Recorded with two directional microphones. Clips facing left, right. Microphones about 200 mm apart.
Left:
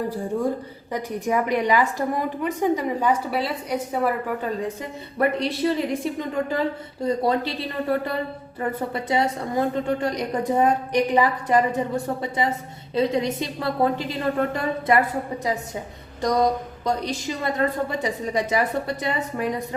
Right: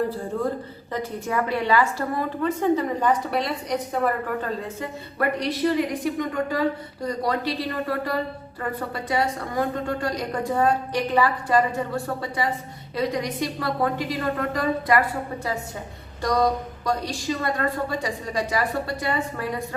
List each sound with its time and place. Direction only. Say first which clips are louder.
0.9 s a woman's voice: left 2 dB; 15° left (ahead or behind)
4.8 s a woman's voice: left 4 dB; 25° left (ahead or behind)
16.2 s a woman's voice: left 1 dB; 20° left (ahead or behind)